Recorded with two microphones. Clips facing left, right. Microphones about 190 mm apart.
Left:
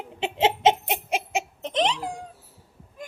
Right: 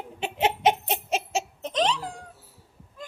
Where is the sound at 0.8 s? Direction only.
10° left (ahead or behind).